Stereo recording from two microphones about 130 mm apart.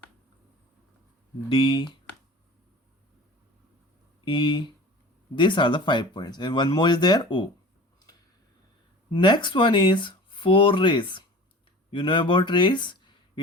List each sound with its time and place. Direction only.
1.5 s speech: 40° left (ahead or behind)
4.3 s speech: 35° left (ahead or behind)
9.1 s speech: 35° left (ahead or behind)